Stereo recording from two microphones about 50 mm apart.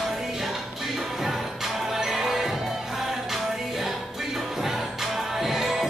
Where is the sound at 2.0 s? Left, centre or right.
Centre.